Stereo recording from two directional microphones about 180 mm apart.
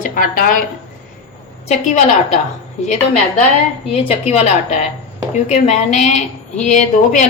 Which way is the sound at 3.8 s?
35° left (ahead or behind).